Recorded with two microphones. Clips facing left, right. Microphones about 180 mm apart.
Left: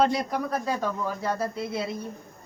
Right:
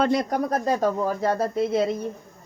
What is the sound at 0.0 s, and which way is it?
Speech, 50° right (ahead or behind).